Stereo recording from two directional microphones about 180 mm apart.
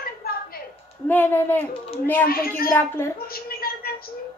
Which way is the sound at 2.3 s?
55° left (ahead or behind).